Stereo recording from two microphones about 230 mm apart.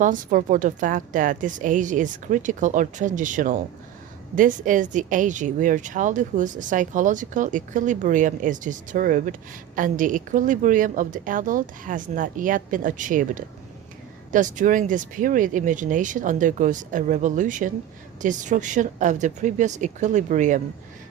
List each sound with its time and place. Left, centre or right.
0.0 s speech: right